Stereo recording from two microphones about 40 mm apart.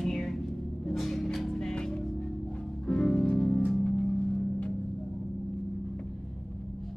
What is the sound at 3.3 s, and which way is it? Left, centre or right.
Music, centre.